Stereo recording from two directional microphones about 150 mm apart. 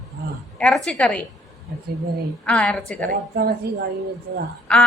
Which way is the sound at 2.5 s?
5° left (ahead or behind).